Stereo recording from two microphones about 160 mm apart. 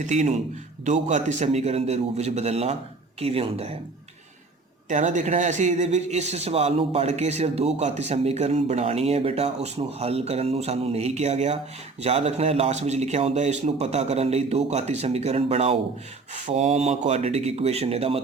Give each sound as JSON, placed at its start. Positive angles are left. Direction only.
{"t": 0.0, "sound": "a man's voice", "side_deg": -50}
{"t": 4.9, "sound": "a man's voice", "side_deg": -50}